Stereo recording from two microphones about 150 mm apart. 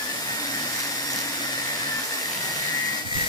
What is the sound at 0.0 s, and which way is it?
Vacuum cleaner, 25° left (ahead or behind).